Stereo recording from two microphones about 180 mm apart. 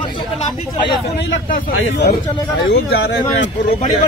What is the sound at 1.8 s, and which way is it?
Speech, 90° left.